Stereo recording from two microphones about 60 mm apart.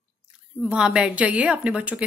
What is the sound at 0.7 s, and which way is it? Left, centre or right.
A woman's voice, centre.